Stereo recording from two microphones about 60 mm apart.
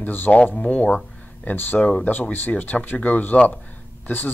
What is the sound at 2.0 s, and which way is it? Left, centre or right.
Speech, left.